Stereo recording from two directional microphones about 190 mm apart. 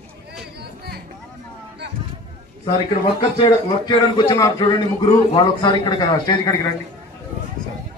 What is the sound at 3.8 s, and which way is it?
A man's voice, 25° left (ahead or behind).